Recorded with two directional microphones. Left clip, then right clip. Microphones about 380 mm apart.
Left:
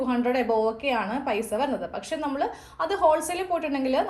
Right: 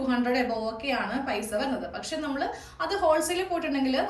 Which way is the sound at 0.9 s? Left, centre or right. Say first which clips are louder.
Left 3 dB; centre.